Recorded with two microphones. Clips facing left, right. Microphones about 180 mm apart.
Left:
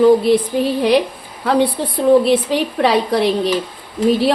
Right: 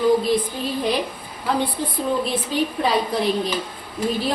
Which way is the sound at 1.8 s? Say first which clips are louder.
Left 10 dB; 75° left (ahead or behind).